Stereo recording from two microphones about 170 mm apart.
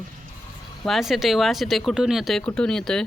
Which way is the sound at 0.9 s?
Centre (ahead or behind).